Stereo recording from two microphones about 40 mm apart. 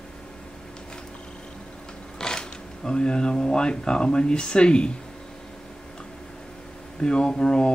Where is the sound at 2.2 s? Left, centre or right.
Centre.